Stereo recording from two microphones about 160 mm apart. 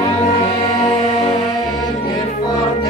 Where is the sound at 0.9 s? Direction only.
40° left (ahead or behind).